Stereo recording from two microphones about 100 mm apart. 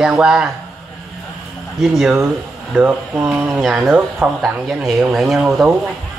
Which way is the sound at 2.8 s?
15° right (ahead or behind).